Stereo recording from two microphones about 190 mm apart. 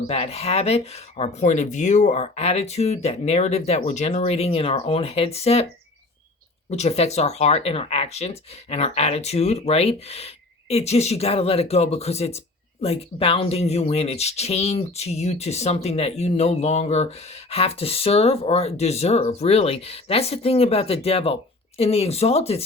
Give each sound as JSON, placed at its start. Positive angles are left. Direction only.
{"t": 0.1, "sound": "speech", "side_deg": 35}
{"t": 6.7, "sound": "speech", "side_deg": 35}